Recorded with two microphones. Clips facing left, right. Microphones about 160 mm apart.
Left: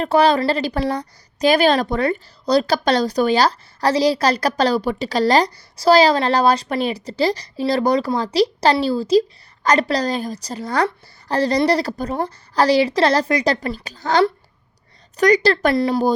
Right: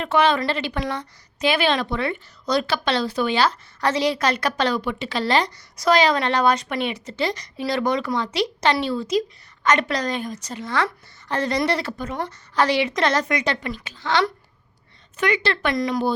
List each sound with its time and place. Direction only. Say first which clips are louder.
0.0 s a woman's voice: left 4 dB; 35° left (ahead or behind)